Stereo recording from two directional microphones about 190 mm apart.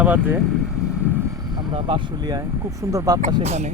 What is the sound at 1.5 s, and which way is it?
Speech, 25° right (ahead or behind).